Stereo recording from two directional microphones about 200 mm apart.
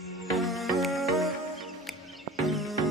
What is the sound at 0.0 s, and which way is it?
Music, centre (ahead or behind).